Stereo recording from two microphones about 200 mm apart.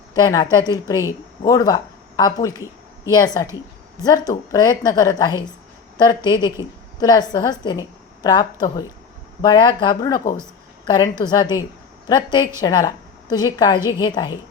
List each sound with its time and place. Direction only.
0.1 s a woman's voice: 20° left (ahead or behind)
4.3 s a woman's voice: 20° left (ahead or behind)